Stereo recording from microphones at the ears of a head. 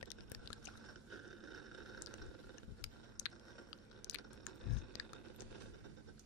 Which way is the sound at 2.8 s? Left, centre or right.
Left.